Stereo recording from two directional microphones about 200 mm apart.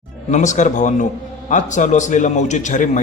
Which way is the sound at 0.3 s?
35° left (ahead or behind).